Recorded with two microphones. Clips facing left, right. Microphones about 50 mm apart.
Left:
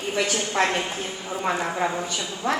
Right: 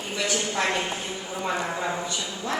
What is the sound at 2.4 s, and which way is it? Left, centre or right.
Speech, left.